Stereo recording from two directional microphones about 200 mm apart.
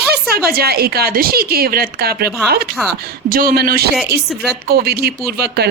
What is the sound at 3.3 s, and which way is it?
Speech, 45° right (ahead or behind).